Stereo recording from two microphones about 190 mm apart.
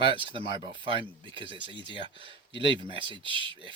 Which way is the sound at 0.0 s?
25° right (ahead or behind).